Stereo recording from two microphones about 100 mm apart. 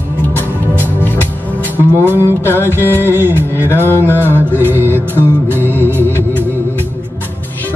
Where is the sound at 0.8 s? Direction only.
20° left (ahead or behind).